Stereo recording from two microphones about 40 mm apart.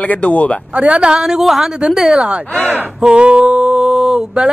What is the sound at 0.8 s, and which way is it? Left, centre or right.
Speech, right.